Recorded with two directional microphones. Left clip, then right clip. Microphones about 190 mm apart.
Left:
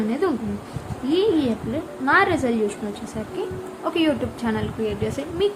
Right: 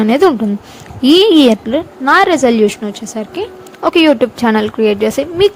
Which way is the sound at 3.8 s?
45° right (ahead or behind).